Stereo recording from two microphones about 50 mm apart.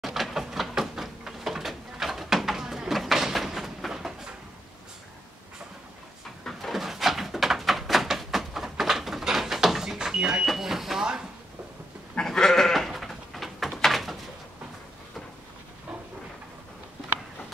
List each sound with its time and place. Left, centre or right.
0.0 s door: centre
6.4 s door: centre
9.2 s vehicle: centre
12.2 s goat: centre
13.7 s a sound: centre